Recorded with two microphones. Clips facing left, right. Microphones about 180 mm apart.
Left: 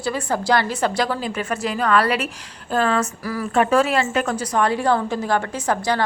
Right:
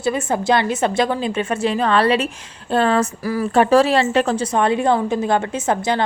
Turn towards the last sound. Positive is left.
turn(degrees=-20)  # may be behind; listen again after turning